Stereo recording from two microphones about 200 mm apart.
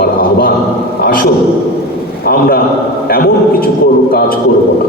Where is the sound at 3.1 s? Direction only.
50° left (ahead or behind).